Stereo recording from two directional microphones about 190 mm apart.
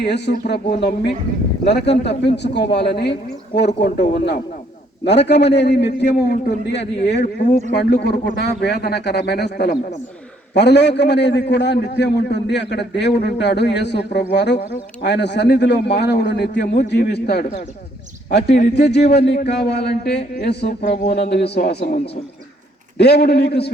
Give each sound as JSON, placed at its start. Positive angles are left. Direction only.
{"t": 0.0, "sound": "a man's voice", "side_deg": 60}
{"t": 23.0, "sound": "a man's voice", "side_deg": 60}